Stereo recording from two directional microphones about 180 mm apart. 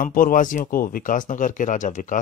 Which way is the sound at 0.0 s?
50° left (ahead or behind).